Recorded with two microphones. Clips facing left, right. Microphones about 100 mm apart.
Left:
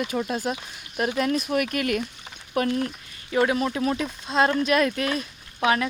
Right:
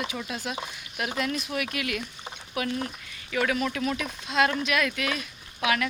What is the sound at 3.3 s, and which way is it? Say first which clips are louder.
Speech: left 4 dB; 30° left (ahead or behind).